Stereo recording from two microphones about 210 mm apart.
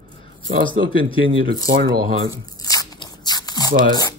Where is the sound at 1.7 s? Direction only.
60° right (ahead or behind).